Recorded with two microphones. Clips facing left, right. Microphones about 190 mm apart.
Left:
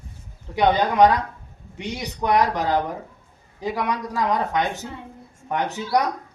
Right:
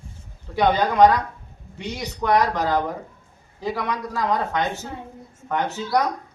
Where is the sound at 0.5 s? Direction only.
20° left (ahead or behind).